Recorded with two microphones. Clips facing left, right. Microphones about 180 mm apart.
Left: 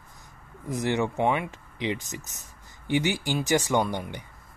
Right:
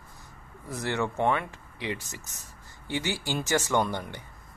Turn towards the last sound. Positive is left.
turn(degrees=15)  # may be behind; listen again after turning